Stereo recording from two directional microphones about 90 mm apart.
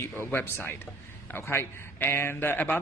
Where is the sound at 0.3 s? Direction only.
25° left (ahead or behind).